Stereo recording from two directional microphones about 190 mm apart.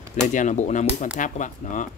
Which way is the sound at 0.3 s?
40° left (ahead or behind).